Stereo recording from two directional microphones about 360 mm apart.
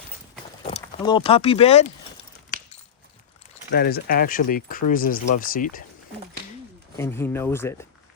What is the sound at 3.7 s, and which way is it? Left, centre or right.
Speech, left.